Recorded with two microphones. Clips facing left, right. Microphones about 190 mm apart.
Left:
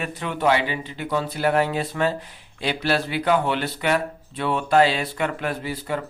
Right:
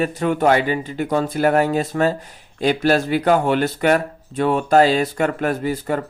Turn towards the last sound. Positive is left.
turn(degrees=-45)  # may be behind; listen again after turning